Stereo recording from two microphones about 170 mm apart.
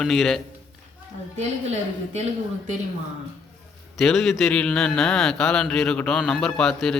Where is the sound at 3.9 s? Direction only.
Centre (ahead or behind).